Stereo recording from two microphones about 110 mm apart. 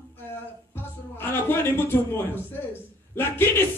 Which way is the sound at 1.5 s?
20° left (ahead or behind).